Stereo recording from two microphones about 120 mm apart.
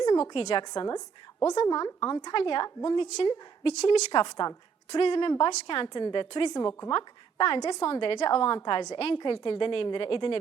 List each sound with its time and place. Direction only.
0.0 s a woman's voice: 35° left (ahead or behind)
2.3 s a woman's voice: 40° left (ahead or behind)
6.7 s a woman's voice: 25° left (ahead or behind)
6.9 s a woman's voice: 45° left (ahead or behind)